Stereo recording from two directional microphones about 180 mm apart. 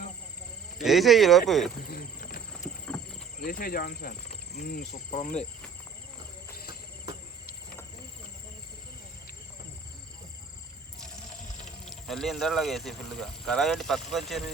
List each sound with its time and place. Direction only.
0.8 s speech: centre (ahead or behind)
1.9 s wild animals: 55° left (ahead or behind)
3.4 s speech: 55° left (ahead or behind)
4.9 s speech: 35° left (ahead or behind)
6.7 s insect: 25° right (ahead or behind)
11.9 s speech: centre (ahead or behind)